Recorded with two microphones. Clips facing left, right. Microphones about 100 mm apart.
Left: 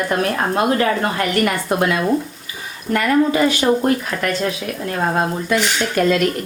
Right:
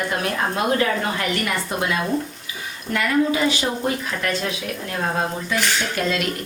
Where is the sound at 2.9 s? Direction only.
50° left (ahead or behind).